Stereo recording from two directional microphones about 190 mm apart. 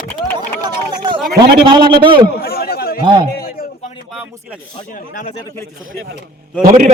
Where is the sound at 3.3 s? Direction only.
50° left (ahead or behind).